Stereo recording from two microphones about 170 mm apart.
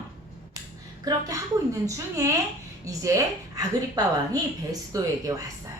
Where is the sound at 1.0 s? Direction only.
20° right (ahead or behind).